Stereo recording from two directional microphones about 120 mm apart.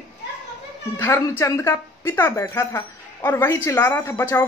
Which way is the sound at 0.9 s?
20° left (ahead or behind).